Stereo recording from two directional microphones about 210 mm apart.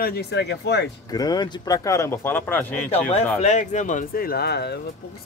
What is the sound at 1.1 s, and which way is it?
Speech, 20° left (ahead or behind).